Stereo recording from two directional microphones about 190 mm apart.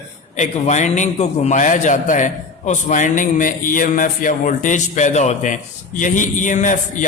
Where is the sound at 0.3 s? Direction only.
35° left (ahead or behind).